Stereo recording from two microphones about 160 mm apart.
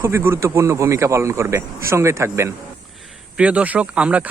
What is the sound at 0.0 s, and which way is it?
Speech, 15° right (ahead or behind).